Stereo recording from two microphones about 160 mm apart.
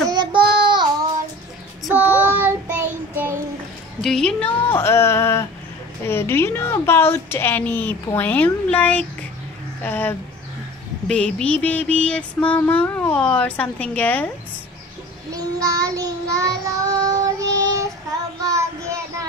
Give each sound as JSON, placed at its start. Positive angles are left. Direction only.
{"t": 0.1, "sound": "child singing", "side_deg": -30}
{"t": 2.4, "sound": "child singing", "side_deg": -10}
{"t": 4.0, "sound": "mantra", "side_deg": 5}
{"t": 15.3, "sound": "child singing", "side_deg": -20}